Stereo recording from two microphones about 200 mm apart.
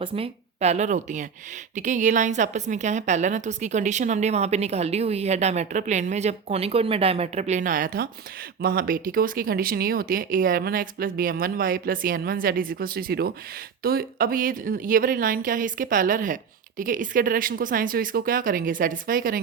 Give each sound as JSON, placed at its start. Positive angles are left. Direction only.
{"t": 0.0, "sound": "a woman's voice", "side_deg": -30}